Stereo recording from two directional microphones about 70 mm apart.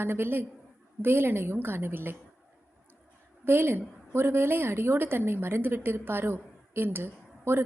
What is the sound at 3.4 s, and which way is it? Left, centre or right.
A woman's voice, right.